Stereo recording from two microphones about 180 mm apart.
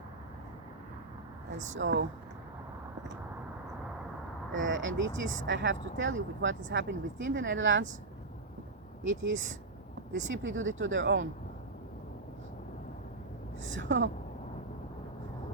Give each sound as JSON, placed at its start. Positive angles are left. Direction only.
{"t": 1.5, "sound": "speech", "side_deg": -40}
{"t": 1.8, "sound": "speech", "side_deg": -90}
{"t": 4.5, "sound": "speech", "side_deg": -90}
{"t": 9.0, "sound": "speech", "side_deg": -90}
{"t": 10.4, "sound": "speech", "side_deg": -90}
{"t": 13.7, "sound": "speech", "side_deg": -90}